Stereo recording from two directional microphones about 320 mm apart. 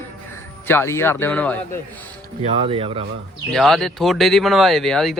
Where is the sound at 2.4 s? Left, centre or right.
Centre.